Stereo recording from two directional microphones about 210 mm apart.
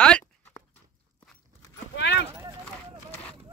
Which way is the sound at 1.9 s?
55° left (ahead or behind).